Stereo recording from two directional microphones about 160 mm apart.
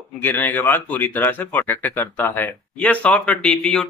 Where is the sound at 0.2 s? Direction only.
10° left (ahead or behind).